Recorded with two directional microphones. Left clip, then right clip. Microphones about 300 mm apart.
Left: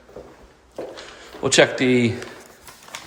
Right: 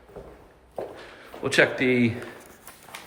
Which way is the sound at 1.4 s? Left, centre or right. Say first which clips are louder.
Left 5 dB; centre.